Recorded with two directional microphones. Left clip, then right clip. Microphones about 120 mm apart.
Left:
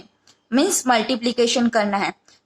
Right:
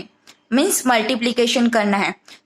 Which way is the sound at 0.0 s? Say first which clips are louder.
Right 10 dB; 40° right (ahead or behind).